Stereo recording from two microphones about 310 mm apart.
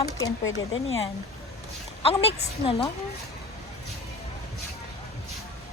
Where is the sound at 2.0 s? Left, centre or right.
Centre.